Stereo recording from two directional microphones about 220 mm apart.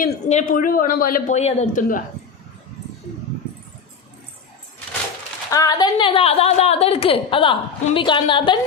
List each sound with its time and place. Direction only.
0.0 s speech: 35° left (ahead or behind)
5.5 s a woman's voice: 15° left (ahead or behind)